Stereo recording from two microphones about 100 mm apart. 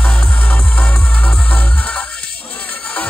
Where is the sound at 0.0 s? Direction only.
10° left (ahead or behind).